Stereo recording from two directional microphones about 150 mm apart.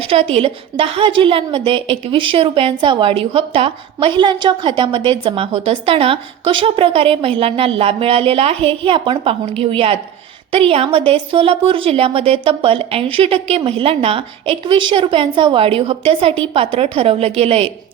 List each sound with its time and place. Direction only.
0.0 s a woman's voice: 40° right (ahead or behind)